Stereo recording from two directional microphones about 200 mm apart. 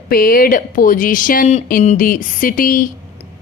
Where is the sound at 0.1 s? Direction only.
45° left (ahead or behind).